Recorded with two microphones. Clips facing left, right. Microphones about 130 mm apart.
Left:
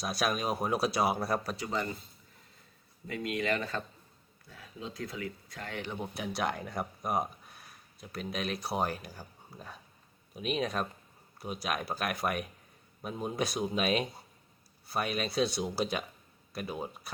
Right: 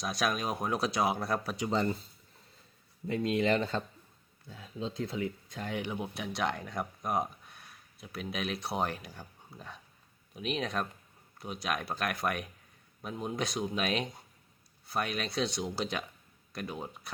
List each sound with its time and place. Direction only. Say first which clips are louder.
0.0 s speech: even; 5° left (ahead or behind)
1.5 s speech: right 4 dB; 25° right (ahead or behind)
3.1 s speech: right 4 dB; 25° right (ahead or behind); by 17.1 s 5° left (ahead or behind)